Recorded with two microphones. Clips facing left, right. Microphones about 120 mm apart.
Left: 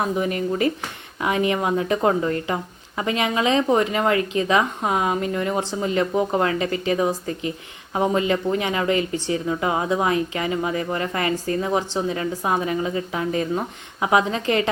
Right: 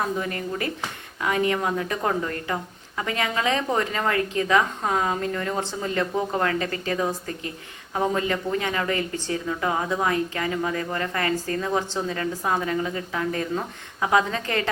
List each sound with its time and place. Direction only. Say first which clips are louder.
0.0 s speech: left 4 dB; 20° left (ahead or behind)